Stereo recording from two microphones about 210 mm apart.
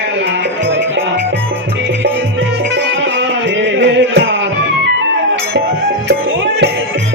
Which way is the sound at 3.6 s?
55° right (ahead or behind).